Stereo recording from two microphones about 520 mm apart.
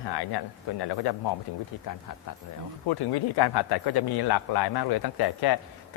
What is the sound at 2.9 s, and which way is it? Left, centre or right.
Speech, left.